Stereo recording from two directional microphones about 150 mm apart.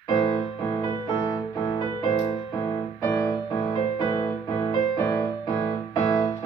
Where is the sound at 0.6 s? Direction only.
30° left (ahead or behind).